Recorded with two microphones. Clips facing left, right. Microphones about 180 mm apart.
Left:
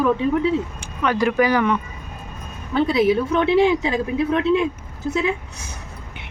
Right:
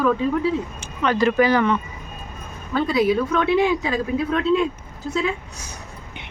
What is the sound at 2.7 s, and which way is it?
Speech, 20° left (ahead or behind).